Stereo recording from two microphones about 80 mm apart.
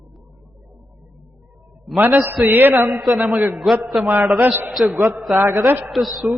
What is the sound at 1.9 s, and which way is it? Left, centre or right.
A man's voice, right.